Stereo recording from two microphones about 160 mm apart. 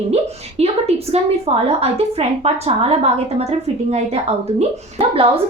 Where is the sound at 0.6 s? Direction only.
40° right (ahead or behind).